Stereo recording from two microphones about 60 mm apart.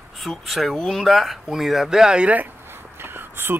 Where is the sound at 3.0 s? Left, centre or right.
Right.